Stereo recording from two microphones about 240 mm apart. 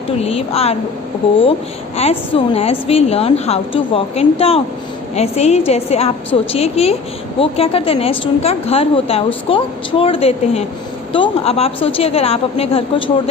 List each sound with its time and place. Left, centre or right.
0.2 s a woman's voice: left
2.0 s a woman's voice: left